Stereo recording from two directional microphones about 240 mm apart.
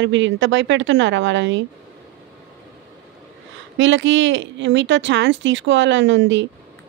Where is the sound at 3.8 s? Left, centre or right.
Right.